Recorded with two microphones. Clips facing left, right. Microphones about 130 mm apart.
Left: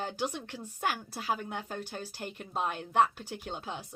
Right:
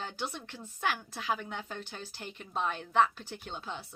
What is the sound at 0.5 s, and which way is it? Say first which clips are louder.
Speech: left 4 dB; 15° left (ahead or behind).